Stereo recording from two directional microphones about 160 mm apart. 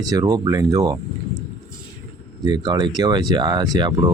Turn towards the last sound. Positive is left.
turn(degrees=-25)  # may be behind; listen again after turning